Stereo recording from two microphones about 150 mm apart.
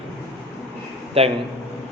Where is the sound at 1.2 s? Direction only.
40° right (ahead or behind).